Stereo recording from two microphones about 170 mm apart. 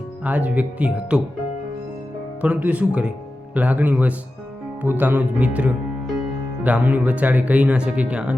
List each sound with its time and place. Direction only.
0.3 s speech: 10° right (ahead or behind)
2.4 s speech: 10° right (ahead or behind)